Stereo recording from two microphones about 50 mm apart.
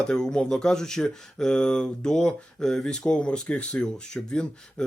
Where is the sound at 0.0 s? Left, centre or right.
Centre.